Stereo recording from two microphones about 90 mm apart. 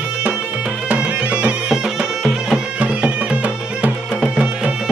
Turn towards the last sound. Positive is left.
turn(degrees=-10)  # may be behind; listen again after turning